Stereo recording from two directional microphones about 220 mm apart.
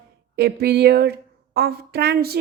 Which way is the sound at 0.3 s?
45° right (ahead or behind).